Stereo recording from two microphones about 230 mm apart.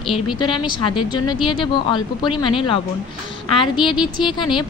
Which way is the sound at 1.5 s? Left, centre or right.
Left.